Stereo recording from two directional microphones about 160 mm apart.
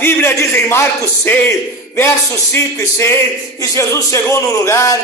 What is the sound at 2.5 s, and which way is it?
A man's voice, 15° left (ahead or behind).